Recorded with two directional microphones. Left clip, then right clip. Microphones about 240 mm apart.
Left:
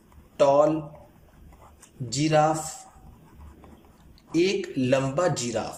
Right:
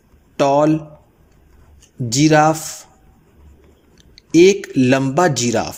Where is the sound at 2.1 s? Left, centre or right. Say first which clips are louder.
Right 9 dB; right.